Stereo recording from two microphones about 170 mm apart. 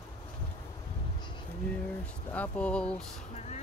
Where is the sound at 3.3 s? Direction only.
40° left (ahead or behind).